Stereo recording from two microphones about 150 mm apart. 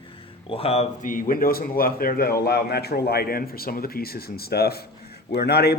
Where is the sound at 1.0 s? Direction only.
70° left (ahead or behind).